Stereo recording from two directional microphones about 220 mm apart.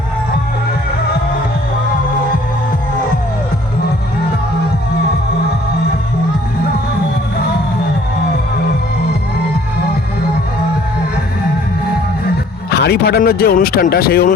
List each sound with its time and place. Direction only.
12.7 s speech: 45° left (ahead or behind)